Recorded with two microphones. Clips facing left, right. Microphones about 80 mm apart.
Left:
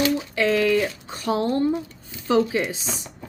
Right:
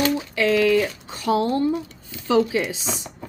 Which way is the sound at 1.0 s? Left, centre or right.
Left.